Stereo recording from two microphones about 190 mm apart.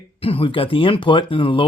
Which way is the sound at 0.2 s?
30° left (ahead or behind).